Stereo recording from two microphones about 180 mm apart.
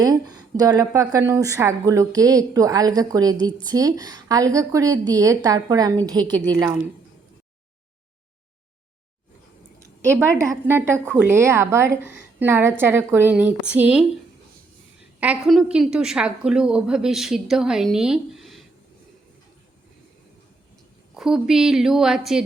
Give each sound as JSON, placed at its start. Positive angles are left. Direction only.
{"t": 0.0, "sound": "a woman's voice", "side_deg": -20}
{"t": 9.8, "sound": "a sound", "side_deg": -15}
{"t": 10.7, "sound": "a woman's voice", "side_deg": -15}
{"t": 15.2, "sound": "a woman's voice", "side_deg": -5}
{"t": 21.2, "sound": "a woman's voice", "side_deg": -5}